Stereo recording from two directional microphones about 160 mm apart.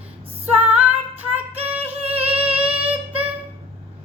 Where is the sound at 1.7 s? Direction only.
10° right (ahead or behind).